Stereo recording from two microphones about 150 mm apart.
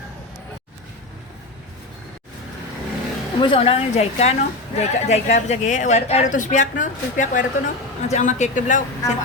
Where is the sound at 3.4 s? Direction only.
35° left (ahead or behind); by 8.8 s 55° left (ahead or behind).